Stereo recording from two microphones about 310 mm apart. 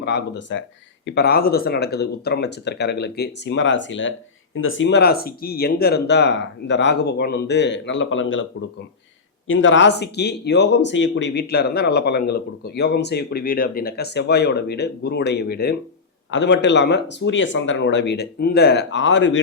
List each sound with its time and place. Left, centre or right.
0.0 s speech: left
9.5 s speech: left